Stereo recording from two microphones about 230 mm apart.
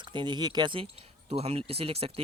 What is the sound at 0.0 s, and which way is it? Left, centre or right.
Speech, centre.